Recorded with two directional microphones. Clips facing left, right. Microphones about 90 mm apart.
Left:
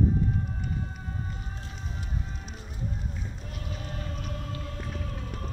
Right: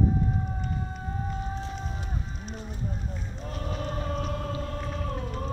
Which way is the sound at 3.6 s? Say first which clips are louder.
Right 7 dB; 40° right (ahead or behind).